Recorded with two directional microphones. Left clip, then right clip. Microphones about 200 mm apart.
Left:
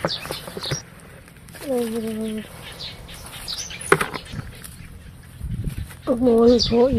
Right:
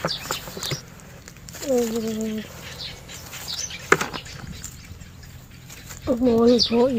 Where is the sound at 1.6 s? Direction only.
10° left (ahead or behind).